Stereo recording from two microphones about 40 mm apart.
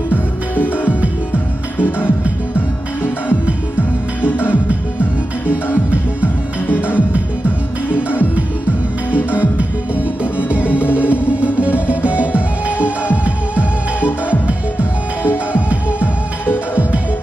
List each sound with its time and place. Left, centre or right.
0.8 s music: right
1.8 s music: left
6.2 s music: left
8.4 s music: right
11.0 s music: right